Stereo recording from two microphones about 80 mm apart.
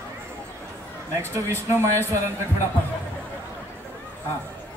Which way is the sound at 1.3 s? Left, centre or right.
Right.